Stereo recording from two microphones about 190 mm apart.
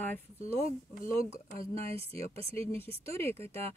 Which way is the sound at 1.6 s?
30° right (ahead or behind).